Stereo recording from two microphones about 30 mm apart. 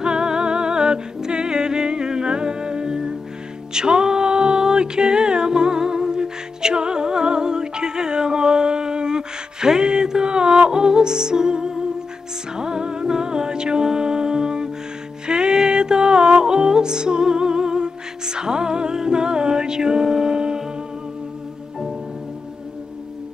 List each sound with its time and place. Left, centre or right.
0.0 s music: right